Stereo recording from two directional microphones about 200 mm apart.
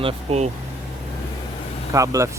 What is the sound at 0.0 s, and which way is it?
Speech, 30° right (ahead or behind).